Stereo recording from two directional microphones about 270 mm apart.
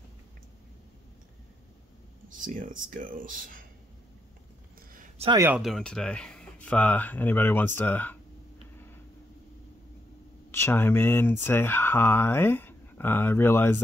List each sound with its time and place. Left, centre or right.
2.2 s speech: right
4.9 s a sound: right
5.3 s speech: centre
10.5 s speech: centre